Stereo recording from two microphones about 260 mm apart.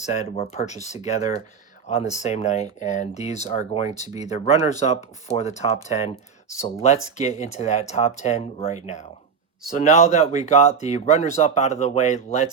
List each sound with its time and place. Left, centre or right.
0.0 s speech: left